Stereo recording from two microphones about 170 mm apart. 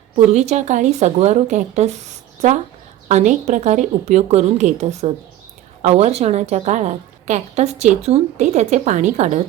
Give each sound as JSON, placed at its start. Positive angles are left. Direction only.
{"t": 0.3, "sound": "a woman's voice", "side_deg": -40}